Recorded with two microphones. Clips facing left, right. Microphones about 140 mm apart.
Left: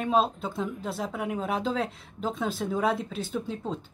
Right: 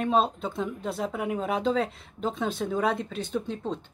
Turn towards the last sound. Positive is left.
turn(degrees=5)  # may be behind; listen again after turning